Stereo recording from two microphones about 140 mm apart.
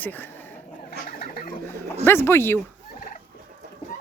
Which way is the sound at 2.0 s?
15° left (ahead or behind).